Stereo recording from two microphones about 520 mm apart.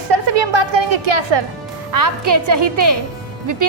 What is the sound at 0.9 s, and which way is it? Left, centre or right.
Speech, right.